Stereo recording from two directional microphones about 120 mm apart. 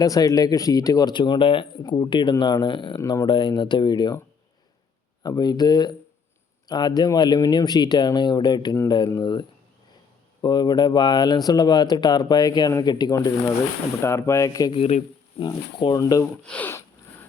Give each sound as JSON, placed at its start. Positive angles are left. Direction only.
{"t": 0.0, "sound": "speech", "side_deg": 30}
{"t": 3.0, "sound": "speech", "side_deg": 25}
{"t": 3.2, "sound": "speech", "side_deg": 40}
{"t": 5.2, "sound": "speech", "side_deg": 35}
{"t": 14.7, "sound": "speech", "side_deg": 55}
{"t": 15.4, "sound": "speech", "side_deg": 40}
{"t": 16.2, "sound": "speech", "side_deg": 10}